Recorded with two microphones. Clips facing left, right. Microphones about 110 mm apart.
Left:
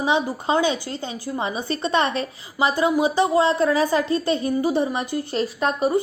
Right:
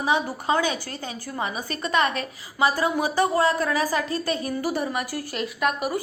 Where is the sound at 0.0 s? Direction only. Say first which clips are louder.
Left 2 dB; 25° left (ahead or behind).